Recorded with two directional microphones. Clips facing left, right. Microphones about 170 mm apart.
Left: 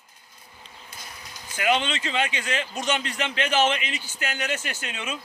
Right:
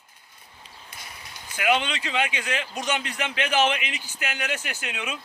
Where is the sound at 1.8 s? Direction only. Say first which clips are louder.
Left 1 dB; 10° right (ahead or behind).